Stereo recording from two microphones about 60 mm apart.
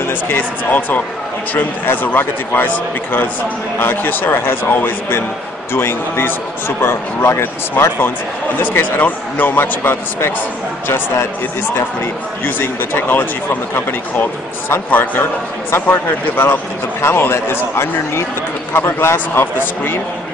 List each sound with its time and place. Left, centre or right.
0.3 s a man's voice: left
12.4 s a man's voice: left